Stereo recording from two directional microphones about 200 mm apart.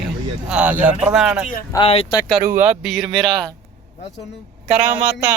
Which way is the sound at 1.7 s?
25° left (ahead or behind).